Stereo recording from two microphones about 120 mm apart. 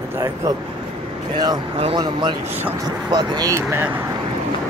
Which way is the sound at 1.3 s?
35° right (ahead or behind).